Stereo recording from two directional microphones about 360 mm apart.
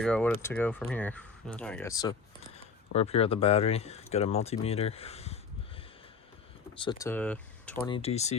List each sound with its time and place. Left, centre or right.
0.0 s speech: centre
6.7 s speech: centre
7.9 s speech: centre